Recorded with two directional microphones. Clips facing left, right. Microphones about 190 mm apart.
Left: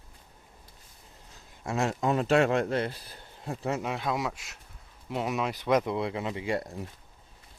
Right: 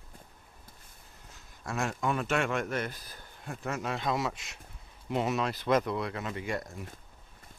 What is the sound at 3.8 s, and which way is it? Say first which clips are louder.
Speech: left 1 dB; 10° left (ahead or behind).